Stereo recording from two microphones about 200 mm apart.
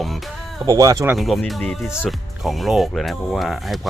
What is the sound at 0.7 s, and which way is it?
Speech, 15° right (ahead or behind).